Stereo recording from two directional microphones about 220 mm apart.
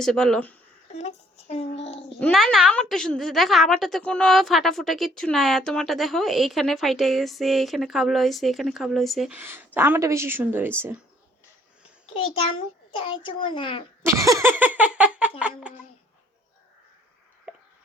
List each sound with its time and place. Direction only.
0.0 s a woman's voice: centre (ahead or behind)
0.9 s a child's voice: 30° left (ahead or behind)
2.1 s a woman's voice: 5° left (ahead or behind)
12.1 s a child's voice: 25° left (ahead or behind)
14.0 s laughter: 15° right (ahead or behind)
15.4 s a woman's voice: 5° right (ahead or behind)
17.5 s a sound: 5° right (ahead or behind)